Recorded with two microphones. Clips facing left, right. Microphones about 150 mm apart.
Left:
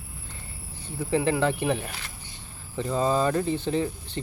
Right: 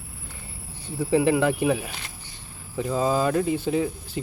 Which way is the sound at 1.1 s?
15° right (ahead or behind).